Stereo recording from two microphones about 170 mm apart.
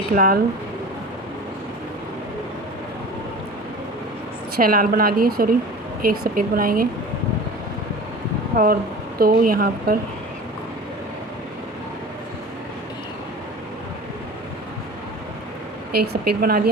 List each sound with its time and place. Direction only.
0.1 s a woman's voice: 55° right (ahead or behind)
4.5 s a woman's voice: 60° right (ahead or behind)
8.5 s a woman's voice: 60° right (ahead or behind)
15.9 s a woman's voice: 65° right (ahead or behind)